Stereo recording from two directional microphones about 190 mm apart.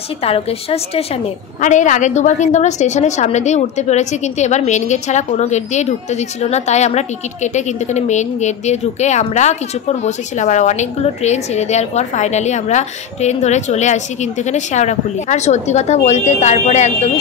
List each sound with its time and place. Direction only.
0.2 s a woman's voice: 30° left (ahead or behind)